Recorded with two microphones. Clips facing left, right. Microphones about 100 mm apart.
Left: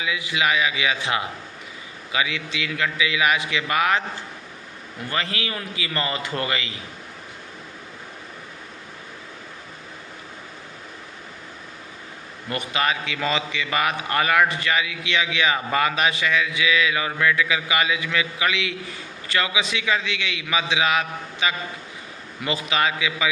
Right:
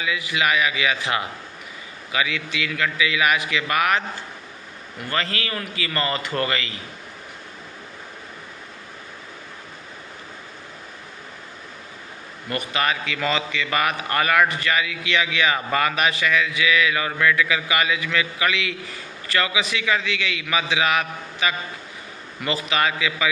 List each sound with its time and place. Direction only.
0.0 s a man's voice: 20° left (ahead or behind)
5.0 s a man's voice: 20° left (ahead or behind)
12.5 s a man's voice: 20° left (ahead or behind)